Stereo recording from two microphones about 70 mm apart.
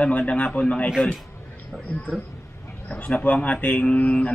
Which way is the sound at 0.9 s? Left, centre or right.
Centre.